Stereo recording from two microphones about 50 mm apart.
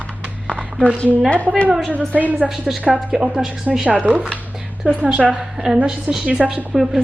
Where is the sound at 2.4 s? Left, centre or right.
Centre.